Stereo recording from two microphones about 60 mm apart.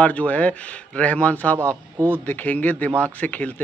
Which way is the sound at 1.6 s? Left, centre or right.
Right.